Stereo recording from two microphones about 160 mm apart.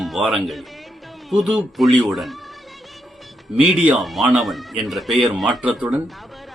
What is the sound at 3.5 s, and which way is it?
A man's voice, 10° right (ahead or behind).